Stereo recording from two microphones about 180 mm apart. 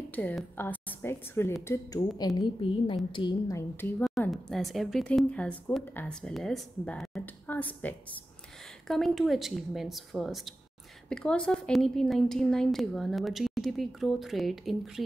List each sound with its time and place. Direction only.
0.1 s a woman's voice: 10° left (ahead or behind)
4.3 s a woman's voice: centre (ahead or behind)